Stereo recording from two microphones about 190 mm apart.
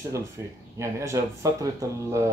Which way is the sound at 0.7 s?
15° right (ahead or behind).